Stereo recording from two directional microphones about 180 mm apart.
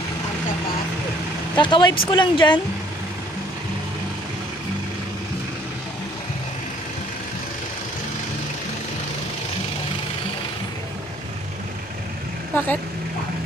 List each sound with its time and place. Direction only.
1.6 s speech: 25° left (ahead or behind)
12.5 s speech: 10° left (ahead or behind)